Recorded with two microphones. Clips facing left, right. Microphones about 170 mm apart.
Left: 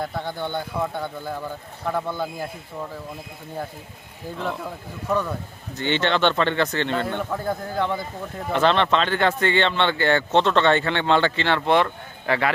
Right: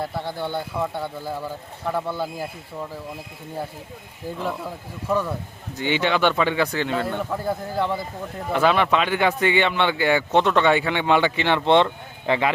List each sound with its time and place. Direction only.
0.0 s speech: 5° right (ahead or behind)
4.4 s speech: 5° right (ahead or behind)